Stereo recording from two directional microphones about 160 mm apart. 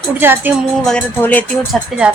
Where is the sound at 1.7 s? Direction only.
5° right (ahead or behind).